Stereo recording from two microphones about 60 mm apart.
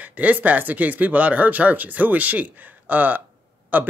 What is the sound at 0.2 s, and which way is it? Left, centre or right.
Speech, right.